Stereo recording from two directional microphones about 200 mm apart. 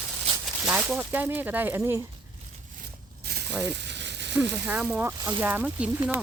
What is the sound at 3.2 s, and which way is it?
Mechanisms, 50° right (ahead or behind).